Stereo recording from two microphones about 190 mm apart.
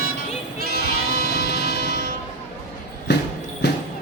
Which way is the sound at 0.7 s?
55° left (ahead or behind).